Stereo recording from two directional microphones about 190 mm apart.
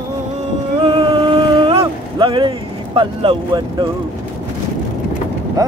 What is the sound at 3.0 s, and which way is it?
Speech, 25° right (ahead or behind).